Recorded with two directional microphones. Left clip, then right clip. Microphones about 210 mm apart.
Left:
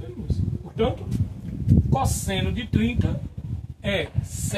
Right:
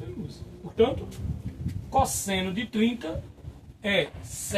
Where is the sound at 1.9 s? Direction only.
15° left (ahead or behind).